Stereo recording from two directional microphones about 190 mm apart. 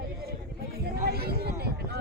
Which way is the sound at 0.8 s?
55° right (ahead or behind).